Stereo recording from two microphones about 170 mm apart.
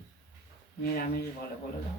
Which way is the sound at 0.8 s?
65° left (ahead or behind).